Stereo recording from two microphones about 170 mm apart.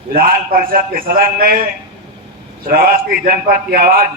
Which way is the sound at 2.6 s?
60° right (ahead or behind).